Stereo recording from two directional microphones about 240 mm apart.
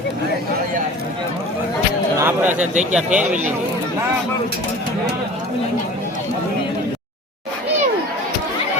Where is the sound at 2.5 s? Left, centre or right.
Right.